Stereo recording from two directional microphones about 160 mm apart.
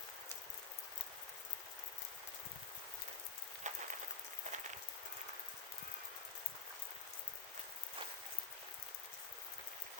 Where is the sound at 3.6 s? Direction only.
50° right (ahead or behind).